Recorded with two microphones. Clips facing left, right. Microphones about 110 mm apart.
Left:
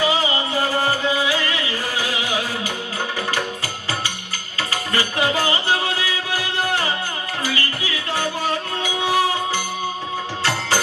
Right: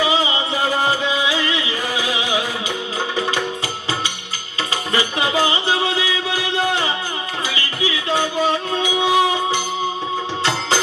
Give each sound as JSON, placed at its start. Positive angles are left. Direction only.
{"t": 0.0, "sound": "music", "side_deg": -20}
{"t": 4.7, "sound": "music", "side_deg": -20}